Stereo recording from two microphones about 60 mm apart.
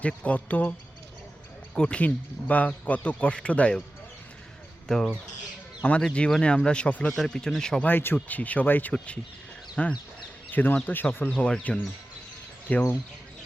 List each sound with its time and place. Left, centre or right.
0.2 s speech: left
1.7 s speech: centre
4.9 s speech: centre
7.8 s speech: left
10.5 s speech: left
11.3 s speech: centre
12.6 s speech: left